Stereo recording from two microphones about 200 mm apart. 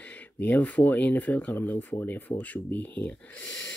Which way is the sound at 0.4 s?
10° left (ahead or behind).